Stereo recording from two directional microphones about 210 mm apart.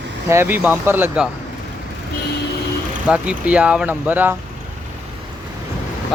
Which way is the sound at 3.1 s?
5° right (ahead or behind).